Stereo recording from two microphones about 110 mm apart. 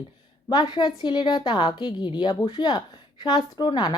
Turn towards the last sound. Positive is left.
turn(degrees=40)  # may be behind; listen again after turning